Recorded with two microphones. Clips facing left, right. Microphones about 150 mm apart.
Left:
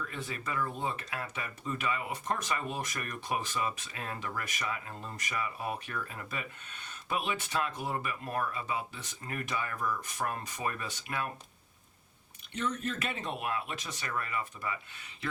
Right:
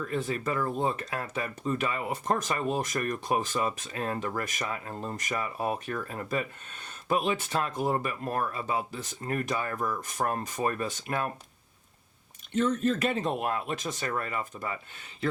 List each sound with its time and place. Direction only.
0.0 s speech: 40° right (ahead or behind)
12.5 s speech: 35° right (ahead or behind)